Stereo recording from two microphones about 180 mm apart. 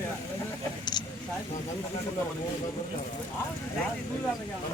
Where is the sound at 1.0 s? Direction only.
25° left (ahead or behind).